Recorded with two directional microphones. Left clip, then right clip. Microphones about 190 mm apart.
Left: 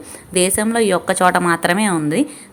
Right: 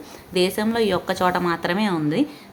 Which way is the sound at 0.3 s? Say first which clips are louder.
Left 4 dB; 20° left (ahead or behind).